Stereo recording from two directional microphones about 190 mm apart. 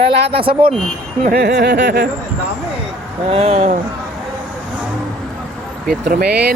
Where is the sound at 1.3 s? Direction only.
60° right (ahead or behind).